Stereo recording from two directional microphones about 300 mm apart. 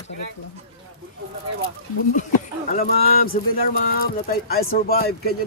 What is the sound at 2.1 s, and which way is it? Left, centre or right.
Speech, left.